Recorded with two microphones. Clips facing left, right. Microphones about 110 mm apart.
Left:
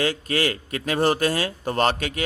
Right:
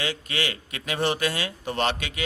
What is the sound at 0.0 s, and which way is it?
A man's voice, 40° left (ahead or behind).